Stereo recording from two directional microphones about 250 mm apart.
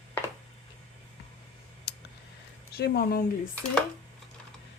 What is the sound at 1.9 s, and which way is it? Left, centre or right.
Clicking, left.